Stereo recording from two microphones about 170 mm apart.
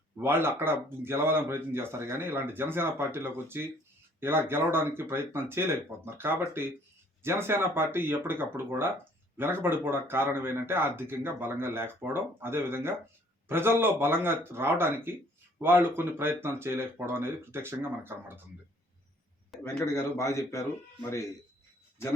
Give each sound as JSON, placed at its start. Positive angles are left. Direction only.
{"t": 0.2, "sound": "speech", "side_deg": -15}
{"t": 19.6, "sound": "speech", "side_deg": 15}